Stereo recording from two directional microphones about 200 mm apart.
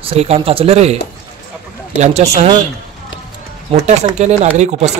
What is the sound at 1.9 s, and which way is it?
Speech, 35° right (ahead or behind).